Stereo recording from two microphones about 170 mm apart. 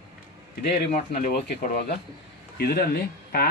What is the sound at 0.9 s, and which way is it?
Speech, 50° left (ahead or behind).